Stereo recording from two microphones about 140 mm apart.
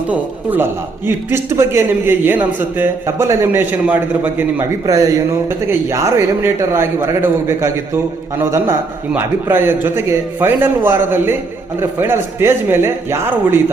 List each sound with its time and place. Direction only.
0.1 s a man's voice: 15° right (ahead or behind)
4.9 s a man's voice: 25° right (ahead or behind)